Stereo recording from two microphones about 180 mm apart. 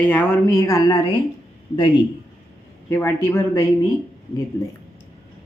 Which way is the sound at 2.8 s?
10° left (ahead or behind).